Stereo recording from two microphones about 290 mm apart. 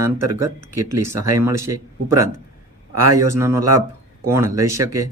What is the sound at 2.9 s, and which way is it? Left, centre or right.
Speech, right.